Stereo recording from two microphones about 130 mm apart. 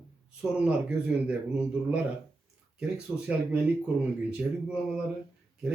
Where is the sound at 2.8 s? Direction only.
10° right (ahead or behind).